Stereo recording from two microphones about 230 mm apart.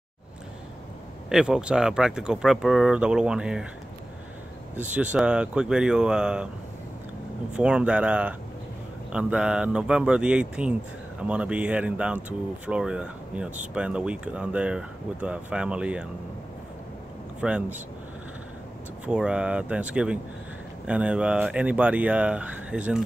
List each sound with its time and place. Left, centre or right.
1.3 s speech: centre
4.7 s speech: centre
7.5 s speech: centre
17.4 s speech: centre
19.0 s speech: centre